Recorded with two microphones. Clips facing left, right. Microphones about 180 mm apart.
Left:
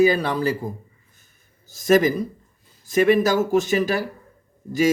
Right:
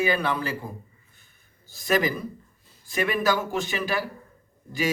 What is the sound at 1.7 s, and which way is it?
A woman's voice, 45° left (ahead or behind).